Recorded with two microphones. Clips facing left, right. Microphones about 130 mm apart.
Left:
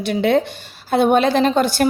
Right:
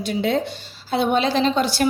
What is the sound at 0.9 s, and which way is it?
Speech, 50° left (ahead or behind).